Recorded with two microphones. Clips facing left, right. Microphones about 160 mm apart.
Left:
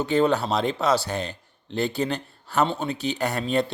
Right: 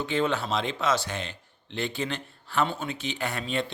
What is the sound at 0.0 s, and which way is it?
A man's voice, 40° left (ahead or behind).